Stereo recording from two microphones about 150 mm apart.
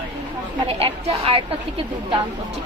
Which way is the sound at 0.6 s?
40° right (ahead or behind).